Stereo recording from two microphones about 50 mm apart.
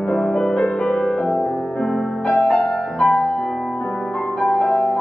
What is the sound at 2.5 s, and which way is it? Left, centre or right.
Music, left.